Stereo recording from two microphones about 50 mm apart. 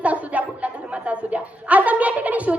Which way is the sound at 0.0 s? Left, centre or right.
Right.